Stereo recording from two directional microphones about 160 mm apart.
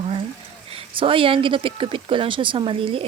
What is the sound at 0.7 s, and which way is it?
Speech, 35° right (ahead or behind).